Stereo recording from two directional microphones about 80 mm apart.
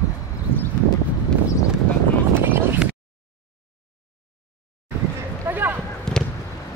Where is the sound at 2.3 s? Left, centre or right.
Right.